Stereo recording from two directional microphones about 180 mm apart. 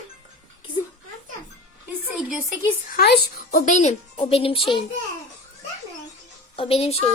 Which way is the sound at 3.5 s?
45° left (ahead or behind).